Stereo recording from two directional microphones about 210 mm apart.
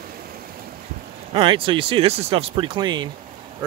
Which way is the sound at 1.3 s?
25° right (ahead or behind).